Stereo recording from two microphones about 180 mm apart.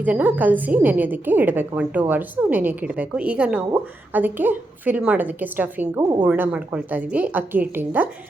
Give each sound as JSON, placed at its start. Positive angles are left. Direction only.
{"t": 0.0, "sound": "a woman's voice", "side_deg": -10}
{"t": 6.0, "sound": "a woman's voice", "side_deg": -25}
{"t": 6.2, "sound": "a woman's voice", "side_deg": -10}